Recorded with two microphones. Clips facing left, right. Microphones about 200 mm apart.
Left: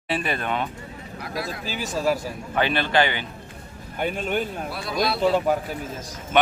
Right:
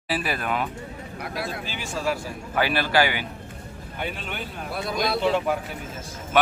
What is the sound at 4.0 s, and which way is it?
Speech, 45° left (ahead or behind).